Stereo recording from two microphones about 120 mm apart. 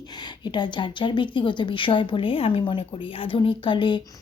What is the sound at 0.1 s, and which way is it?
A woman's voice, 40° left (ahead or behind).